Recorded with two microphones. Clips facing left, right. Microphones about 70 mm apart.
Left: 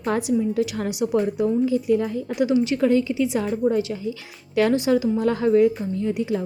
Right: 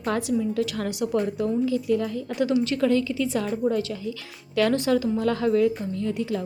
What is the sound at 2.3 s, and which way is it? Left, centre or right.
A woman's voice, centre.